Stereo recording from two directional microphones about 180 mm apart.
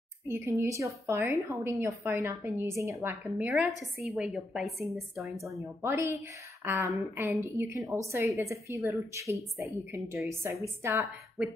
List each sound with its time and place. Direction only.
0.3 s a woman's voice: 15° right (ahead or behind); by 5.6 s centre (ahead or behind)
5.8 s a woman's voice: 15° right (ahead or behind)